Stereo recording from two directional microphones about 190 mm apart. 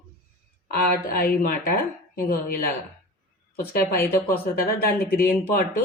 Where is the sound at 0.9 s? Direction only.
50° left (ahead or behind).